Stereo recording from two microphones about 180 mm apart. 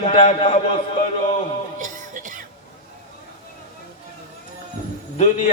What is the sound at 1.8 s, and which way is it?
Music, 45° right (ahead or behind).